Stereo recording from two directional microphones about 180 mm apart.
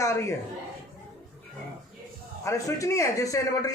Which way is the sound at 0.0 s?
15° left (ahead or behind).